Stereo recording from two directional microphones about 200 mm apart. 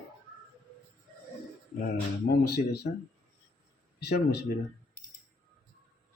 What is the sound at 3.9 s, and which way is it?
Speech, 55° left (ahead or behind).